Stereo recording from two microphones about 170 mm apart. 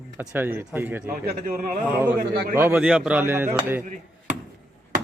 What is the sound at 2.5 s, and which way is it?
A man's voice, 15° right (ahead or behind).